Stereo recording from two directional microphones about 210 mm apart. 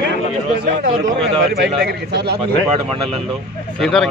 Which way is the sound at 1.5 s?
50° right (ahead or behind).